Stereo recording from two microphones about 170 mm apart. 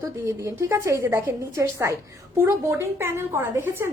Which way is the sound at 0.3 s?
20° right (ahead or behind).